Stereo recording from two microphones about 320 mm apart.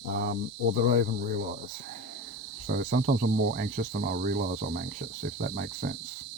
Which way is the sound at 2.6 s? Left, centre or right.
Right.